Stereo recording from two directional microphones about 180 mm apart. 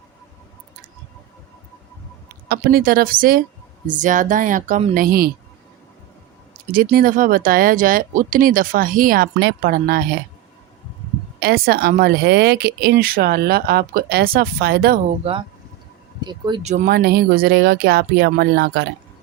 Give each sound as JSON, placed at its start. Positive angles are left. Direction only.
{"t": 2.5, "sound": "speech", "side_deg": -55}
{"t": 6.9, "sound": "speech", "side_deg": -50}
{"t": 11.3, "sound": "speech", "side_deg": -60}
{"t": 15.2, "sound": "speech", "side_deg": -30}
{"t": 16.6, "sound": "speech", "side_deg": -50}